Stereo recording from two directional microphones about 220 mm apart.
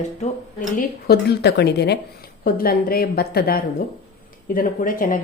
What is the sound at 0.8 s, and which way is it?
A woman's voice, 45° left (ahead or behind).